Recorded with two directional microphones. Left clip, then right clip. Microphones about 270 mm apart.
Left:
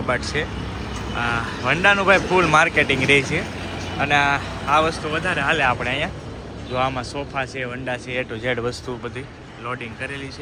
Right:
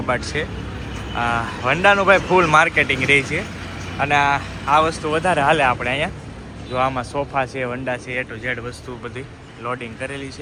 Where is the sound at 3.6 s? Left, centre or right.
Left.